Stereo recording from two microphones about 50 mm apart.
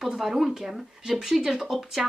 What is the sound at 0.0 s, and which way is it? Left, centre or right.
A woman's voice, centre.